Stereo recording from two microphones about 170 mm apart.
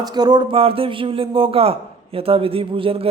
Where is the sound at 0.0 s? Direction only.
25° right (ahead or behind).